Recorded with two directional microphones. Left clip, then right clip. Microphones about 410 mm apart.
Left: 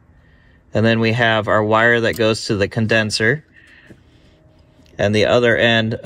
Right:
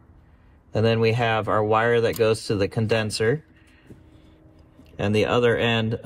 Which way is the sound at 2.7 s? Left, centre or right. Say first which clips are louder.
Left 9 dB; left.